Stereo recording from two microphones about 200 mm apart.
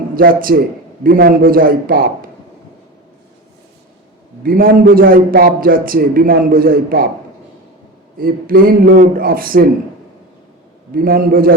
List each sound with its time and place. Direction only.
0.2 s a man's voice: 45° right (ahead or behind)
4.4 s a man's voice: 45° right (ahead or behind)
8.2 s a man's voice: 45° right (ahead or behind)
10.9 s a man's voice: 45° right (ahead or behind)